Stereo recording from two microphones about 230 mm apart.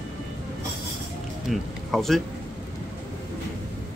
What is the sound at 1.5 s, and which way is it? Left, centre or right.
Speech, centre.